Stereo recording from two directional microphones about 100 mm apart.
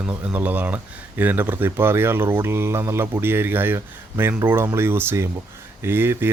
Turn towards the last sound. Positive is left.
turn(degrees=-20)  # may be behind; listen again after turning